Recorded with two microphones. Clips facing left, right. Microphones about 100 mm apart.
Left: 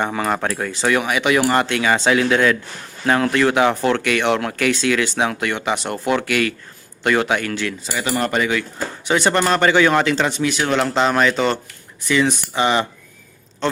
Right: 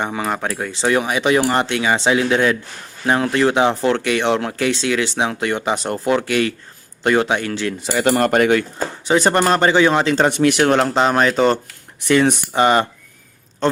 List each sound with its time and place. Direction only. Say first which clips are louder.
0.0 s speech: left 1 dB; 10° right (ahead or behind)
0.7 s speech: right 2 dB; 25° right (ahead or behind)
7.8 s speech: right 7 dB; 60° right (ahead or behind)
8.1 s speech: right 4 dB; 50° right (ahead or behind)
9.0 s a man's voice: right 2 dB; 35° right (ahead or behind)
10.2 s speech: right 5 dB; 55° right (ahead or behind)
10.8 s a man's voice: right 1 dB; 35° right (ahead or behind)
12.0 s speech: right 3 dB; 55° right (ahead or behind)